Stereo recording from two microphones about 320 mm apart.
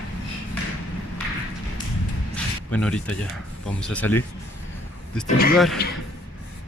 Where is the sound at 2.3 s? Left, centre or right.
Centre.